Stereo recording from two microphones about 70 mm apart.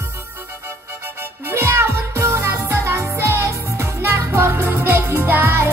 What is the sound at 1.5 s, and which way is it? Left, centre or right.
Music, right.